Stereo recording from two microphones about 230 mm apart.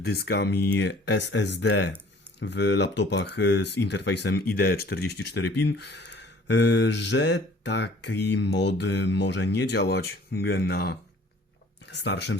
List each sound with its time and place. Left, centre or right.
0.0 s speech: left